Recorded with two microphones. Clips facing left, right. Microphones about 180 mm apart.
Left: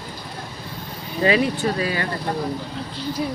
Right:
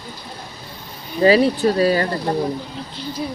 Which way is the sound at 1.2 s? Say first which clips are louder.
Right 5 dB; 35° right (ahead or behind).